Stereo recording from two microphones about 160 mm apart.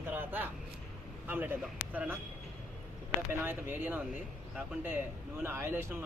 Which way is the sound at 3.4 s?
15° right (ahead or behind).